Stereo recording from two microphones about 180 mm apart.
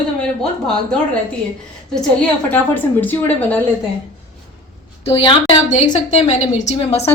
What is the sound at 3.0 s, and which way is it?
Speech, 10° left (ahead or behind).